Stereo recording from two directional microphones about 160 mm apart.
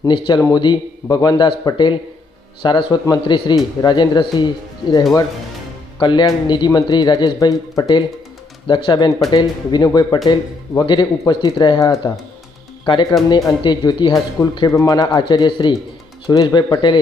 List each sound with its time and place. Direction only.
0.0 s a man's voice: 25° left (ahead or behind)